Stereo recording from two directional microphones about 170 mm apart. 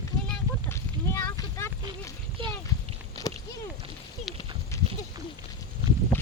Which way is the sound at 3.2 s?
20° left (ahead or behind).